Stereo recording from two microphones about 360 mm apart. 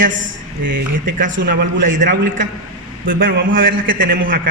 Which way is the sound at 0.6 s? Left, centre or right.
Right.